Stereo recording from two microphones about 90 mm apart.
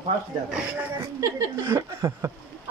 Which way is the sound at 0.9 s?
30° right (ahead or behind).